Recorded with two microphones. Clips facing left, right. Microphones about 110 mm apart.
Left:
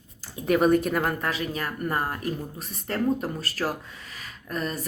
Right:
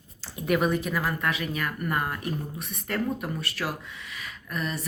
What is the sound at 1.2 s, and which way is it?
Speech, 35° left (ahead or behind).